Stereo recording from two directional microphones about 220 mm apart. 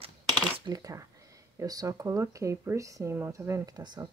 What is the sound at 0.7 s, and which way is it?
Speech, 15° right (ahead or behind).